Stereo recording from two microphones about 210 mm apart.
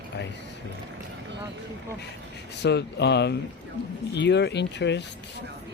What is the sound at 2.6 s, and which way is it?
Speech, 55° left (ahead or behind).